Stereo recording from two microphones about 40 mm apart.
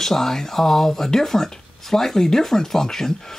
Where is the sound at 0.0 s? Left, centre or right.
Centre.